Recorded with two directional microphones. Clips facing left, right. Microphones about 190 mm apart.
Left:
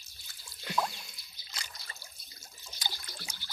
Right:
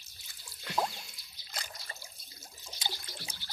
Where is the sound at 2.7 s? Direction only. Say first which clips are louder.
Right 1 dB; 25° right (ahead or behind).